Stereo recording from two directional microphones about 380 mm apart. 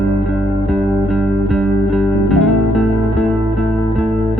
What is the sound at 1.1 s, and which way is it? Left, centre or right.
Music, centre.